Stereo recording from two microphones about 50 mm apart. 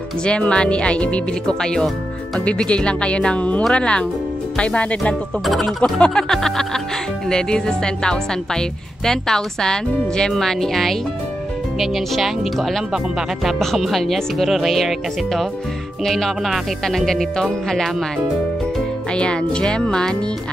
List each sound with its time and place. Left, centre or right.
0.2 s a woman's voice: centre
19.1 s a woman's voice: centre